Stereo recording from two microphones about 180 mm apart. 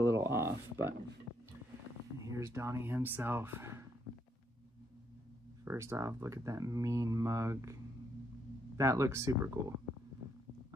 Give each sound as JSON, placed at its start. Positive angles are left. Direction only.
{"t": 0.0, "sound": "a sound", "side_deg": -15}
{"t": 2.1, "sound": "speech", "side_deg": -20}
{"t": 5.7, "sound": "speech", "side_deg": -15}
{"t": 8.7, "sound": "speech", "side_deg": -15}